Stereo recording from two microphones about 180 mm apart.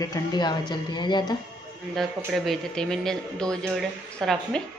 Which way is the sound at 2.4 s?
Centre (ahead or behind).